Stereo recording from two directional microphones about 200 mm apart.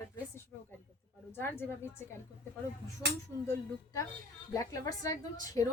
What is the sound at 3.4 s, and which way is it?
A woman's voice, 15° left (ahead or behind).